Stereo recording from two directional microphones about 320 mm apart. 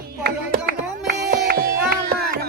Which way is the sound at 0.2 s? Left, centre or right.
Right.